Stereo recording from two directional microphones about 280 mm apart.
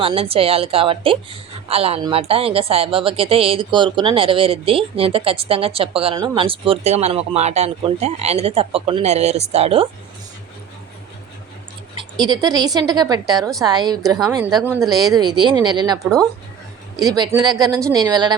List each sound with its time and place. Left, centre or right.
0.0 s speech: centre
12.2 s a woman's voice: centre
17.0 s a woman's voice: centre